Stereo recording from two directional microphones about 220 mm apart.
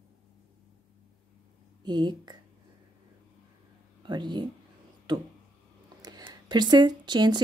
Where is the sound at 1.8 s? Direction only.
20° right (ahead or behind).